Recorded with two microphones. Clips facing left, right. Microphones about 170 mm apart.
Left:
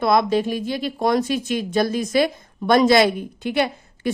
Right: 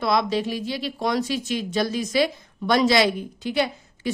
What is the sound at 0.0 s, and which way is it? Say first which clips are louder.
Speech: left 4 dB; 50° left (ahead or behind).